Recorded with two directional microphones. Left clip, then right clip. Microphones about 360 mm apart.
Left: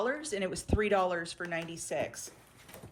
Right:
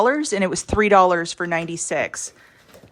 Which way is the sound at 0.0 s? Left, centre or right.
Centre.